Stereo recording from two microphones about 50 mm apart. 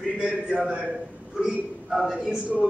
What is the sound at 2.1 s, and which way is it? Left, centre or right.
Speech, right.